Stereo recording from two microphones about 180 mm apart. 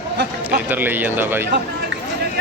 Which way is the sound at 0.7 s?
10° right (ahead or behind).